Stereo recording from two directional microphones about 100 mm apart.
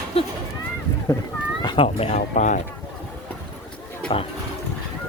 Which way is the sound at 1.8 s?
85° left.